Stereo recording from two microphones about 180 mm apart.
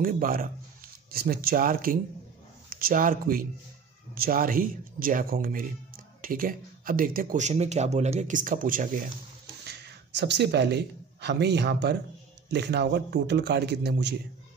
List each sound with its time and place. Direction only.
0.0 s speech: 50° right (ahead or behind)
9.7 s a man's voice: 70° right (ahead or behind)